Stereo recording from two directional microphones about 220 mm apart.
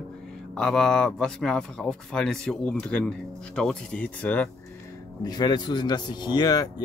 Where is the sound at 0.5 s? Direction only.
5° left (ahead or behind).